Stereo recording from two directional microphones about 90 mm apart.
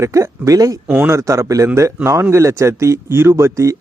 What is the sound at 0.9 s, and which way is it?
Speech, 20° right (ahead or behind).